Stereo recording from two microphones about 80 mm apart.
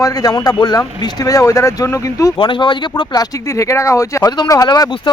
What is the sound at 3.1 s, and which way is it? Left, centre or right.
Speech, left.